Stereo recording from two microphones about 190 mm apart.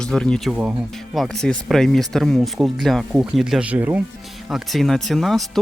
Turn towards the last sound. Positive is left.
turn(degrees=0)  # may be behind; listen again after turning